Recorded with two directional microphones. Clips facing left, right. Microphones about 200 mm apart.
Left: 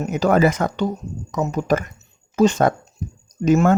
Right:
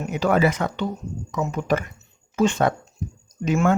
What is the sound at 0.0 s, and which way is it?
Speech, 40° left (ahead or behind).